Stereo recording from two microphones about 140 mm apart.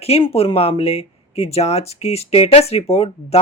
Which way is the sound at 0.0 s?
45° left (ahead or behind).